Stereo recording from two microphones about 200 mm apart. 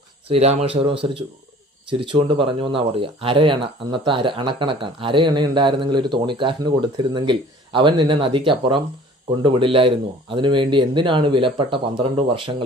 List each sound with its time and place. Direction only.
0.3 s speech: 30° right (ahead or behind)